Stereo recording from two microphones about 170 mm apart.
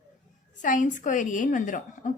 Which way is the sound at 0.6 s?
50° left (ahead or behind).